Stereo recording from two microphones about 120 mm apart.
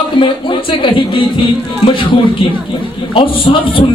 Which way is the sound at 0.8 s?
45° left (ahead or behind).